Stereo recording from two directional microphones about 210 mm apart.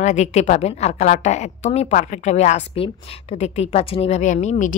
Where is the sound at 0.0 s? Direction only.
35° left (ahead or behind).